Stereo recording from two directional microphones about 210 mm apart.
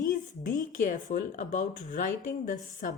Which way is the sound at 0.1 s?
40° left (ahead or behind).